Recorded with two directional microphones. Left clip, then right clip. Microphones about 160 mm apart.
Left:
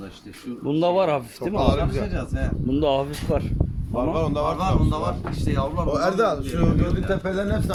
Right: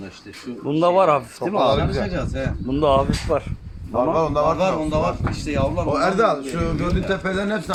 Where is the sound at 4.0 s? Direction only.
10° right (ahead or behind).